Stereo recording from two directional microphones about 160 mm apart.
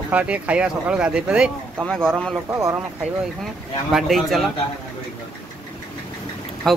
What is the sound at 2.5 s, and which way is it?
Speech, 15° right (ahead or behind).